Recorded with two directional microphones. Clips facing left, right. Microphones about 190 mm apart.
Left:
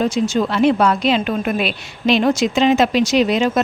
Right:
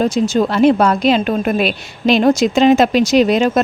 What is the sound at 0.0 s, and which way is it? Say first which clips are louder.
A woman's voice: right 3 dB; 40° right (ahead or behind).